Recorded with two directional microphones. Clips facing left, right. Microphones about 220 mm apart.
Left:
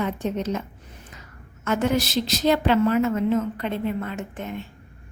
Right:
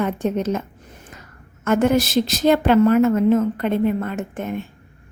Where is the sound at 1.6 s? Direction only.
50° right (ahead or behind).